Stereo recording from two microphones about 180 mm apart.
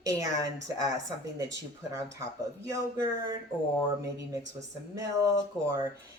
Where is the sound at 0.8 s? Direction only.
20° right (ahead or behind).